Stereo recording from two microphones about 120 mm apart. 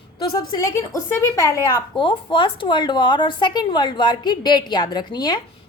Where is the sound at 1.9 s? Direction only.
45° left (ahead or behind).